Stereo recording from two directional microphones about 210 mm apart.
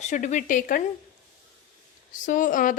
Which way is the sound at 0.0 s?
35° left (ahead or behind).